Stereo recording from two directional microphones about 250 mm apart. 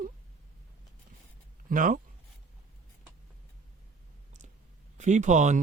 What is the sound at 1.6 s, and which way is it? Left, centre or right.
Speech, right.